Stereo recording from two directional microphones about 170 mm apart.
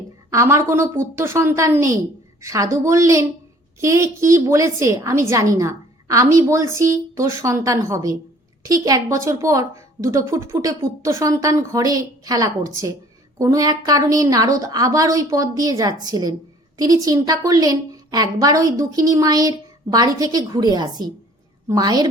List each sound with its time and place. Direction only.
0.3 s a woman's voice: 15° right (ahead or behind)
21.7 s a woman's voice: 20° right (ahead or behind)